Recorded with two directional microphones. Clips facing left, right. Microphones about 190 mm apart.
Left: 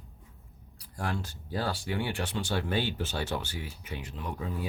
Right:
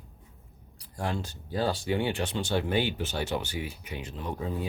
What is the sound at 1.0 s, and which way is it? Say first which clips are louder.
Speech: right 2 dB; 20° right (ahead or behind).